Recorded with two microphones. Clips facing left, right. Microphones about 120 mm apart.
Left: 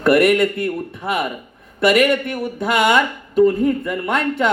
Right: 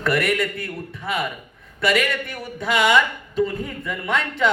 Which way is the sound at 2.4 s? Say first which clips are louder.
Left 1 dB; 50° left (ahead or behind).